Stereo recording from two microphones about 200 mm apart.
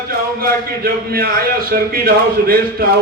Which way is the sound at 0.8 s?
50° right (ahead or behind).